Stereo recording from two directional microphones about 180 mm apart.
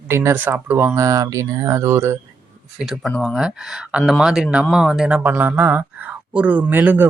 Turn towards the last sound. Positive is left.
turn(degrees=-10)  # may be behind; listen again after turning